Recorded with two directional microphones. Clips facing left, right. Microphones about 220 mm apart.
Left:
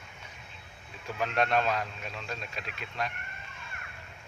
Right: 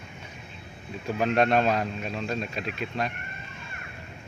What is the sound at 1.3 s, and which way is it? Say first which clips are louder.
Speech: right 5 dB; 25° right (ahead or behind).